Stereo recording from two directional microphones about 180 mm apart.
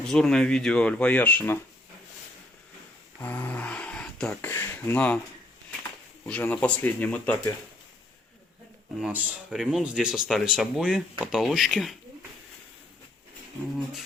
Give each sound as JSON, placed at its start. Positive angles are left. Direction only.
{"t": 0.1, "sound": "speech", "side_deg": 5}
{"t": 3.2, "sound": "a sound", "side_deg": 10}
{"t": 4.4, "sound": "speech", "side_deg": 15}
{"t": 6.2, "sound": "speech", "side_deg": 10}
{"t": 9.0, "sound": "speech", "side_deg": -5}